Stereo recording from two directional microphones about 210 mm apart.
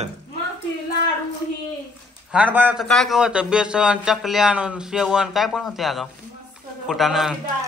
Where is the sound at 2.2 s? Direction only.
5° right (ahead or behind).